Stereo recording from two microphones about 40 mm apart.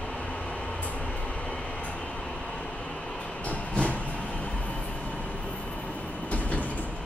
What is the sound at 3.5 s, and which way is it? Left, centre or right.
Vehicle, left.